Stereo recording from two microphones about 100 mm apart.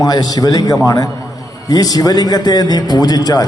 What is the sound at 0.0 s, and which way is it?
A man's voice, 40° left (ahead or behind).